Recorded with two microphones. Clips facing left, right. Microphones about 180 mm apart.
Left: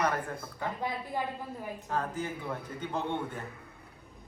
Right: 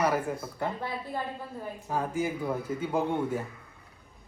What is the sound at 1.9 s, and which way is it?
Speech, 10° right (ahead or behind).